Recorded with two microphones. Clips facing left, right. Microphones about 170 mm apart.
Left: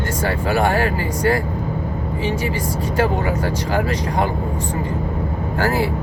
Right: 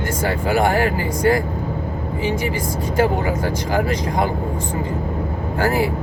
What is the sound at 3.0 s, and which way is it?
Speech, 15° right (ahead or behind).